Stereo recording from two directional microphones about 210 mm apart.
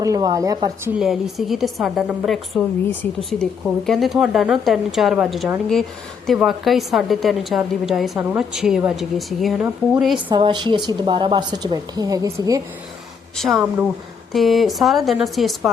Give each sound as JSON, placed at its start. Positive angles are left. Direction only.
{"t": 0.0, "sound": "speech", "side_deg": -15}
{"t": 0.9, "sound": "a woman's voice", "side_deg": 0}
{"t": 10.2, "sound": "a woman's voice", "side_deg": -20}
{"t": 13.3, "sound": "a woman's voice", "side_deg": 0}